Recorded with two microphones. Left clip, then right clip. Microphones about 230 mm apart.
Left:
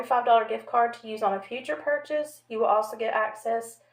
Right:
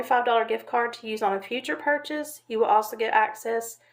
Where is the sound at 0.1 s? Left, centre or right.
Right.